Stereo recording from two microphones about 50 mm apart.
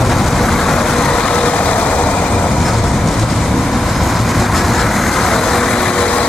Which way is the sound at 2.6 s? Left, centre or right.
Centre.